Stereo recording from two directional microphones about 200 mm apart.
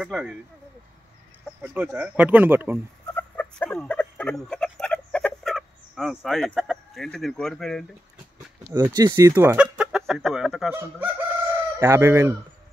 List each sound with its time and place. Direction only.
0.0 s speech: 5° right (ahead or behind)
1.6 s speech: 10° right (ahead or behind)
3.2 s a sound: 10° left (ahead or behind)
8.6 s speech: 10° right (ahead or behind)